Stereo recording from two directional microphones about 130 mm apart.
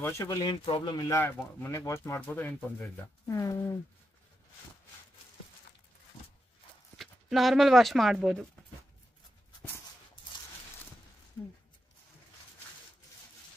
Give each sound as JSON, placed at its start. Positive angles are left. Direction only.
{"t": 0.0, "sound": "speech", "side_deg": 25}
{"t": 1.1, "sound": "speech", "side_deg": 20}
{"t": 3.3, "sound": "speech", "side_deg": 25}
{"t": 7.0, "sound": "speech", "side_deg": 0}